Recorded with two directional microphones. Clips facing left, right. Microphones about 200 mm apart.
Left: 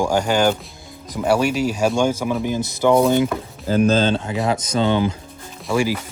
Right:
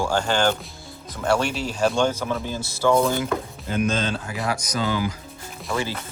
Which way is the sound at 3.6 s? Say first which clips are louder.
Left 8 dB; 35° left (ahead or behind).